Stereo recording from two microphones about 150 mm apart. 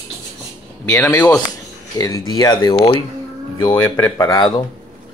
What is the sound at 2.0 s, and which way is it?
Speech, 25° left (ahead or behind).